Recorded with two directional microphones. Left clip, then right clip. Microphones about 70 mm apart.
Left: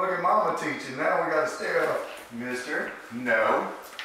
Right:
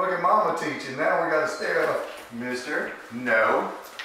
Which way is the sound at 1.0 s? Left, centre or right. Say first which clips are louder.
Right 2 dB; centre.